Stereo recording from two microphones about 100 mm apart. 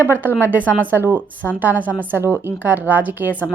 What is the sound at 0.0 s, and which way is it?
Speech, 20° right (ahead or behind).